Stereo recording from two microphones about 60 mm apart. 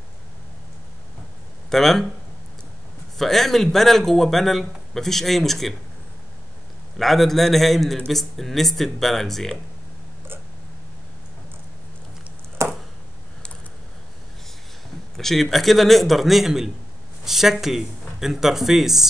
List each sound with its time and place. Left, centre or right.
1.7 s a man's voice: centre
3.2 s a man's voice: centre
7.0 s a man's voice: centre
12.6 s a sound: right
15.1 s a man's voice: centre